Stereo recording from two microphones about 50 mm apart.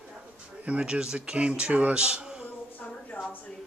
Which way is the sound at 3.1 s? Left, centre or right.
Left.